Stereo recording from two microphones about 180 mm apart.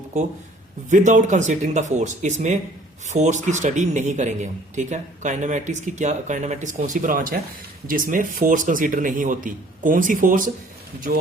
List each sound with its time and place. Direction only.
0.1 s a man's voice: 40° right (ahead or behind)